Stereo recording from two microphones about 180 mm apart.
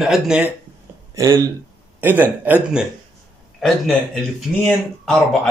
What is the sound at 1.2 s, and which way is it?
A man's voice, 15° right (ahead or behind).